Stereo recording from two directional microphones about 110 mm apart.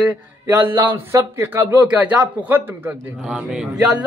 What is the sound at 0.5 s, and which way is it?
Speech, 20° right (ahead or behind).